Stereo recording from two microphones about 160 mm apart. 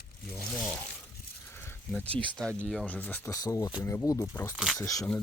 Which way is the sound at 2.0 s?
10° left (ahead or behind).